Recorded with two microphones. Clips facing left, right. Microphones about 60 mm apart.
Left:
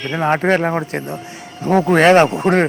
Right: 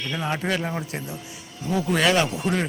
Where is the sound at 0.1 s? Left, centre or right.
Left.